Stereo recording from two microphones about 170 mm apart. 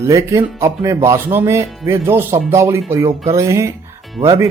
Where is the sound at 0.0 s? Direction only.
15° right (ahead or behind).